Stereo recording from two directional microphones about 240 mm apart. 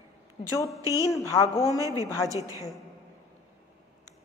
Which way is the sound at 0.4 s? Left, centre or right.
Centre.